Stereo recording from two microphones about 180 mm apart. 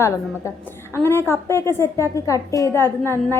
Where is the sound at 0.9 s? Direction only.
15° left (ahead or behind).